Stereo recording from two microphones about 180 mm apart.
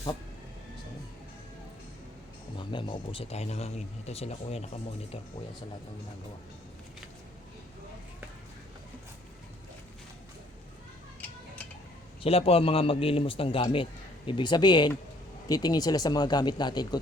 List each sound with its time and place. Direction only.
2.6 s speech: 25° left (ahead or behind)
12.2 s speech: 35° left (ahead or behind)